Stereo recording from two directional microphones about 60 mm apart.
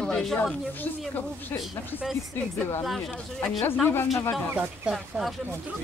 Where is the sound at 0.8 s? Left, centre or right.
Left.